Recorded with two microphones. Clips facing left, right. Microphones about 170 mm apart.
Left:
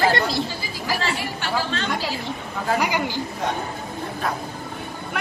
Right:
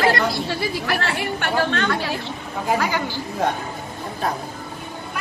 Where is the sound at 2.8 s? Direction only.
15° left (ahead or behind).